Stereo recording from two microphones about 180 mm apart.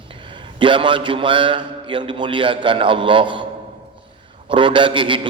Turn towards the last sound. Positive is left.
turn(degrees=-30)  # may be behind; listen again after turning